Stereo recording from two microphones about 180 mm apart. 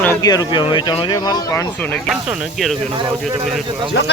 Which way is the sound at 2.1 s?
Centre (ahead or behind).